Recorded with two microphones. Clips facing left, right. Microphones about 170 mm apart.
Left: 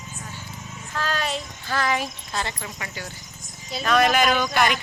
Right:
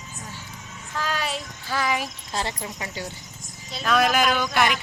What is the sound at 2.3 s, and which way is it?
Speech, 35° right (ahead or behind).